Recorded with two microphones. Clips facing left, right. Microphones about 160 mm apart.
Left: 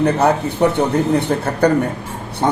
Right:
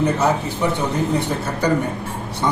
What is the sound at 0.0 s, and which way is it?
Speech, 60° left (ahead or behind).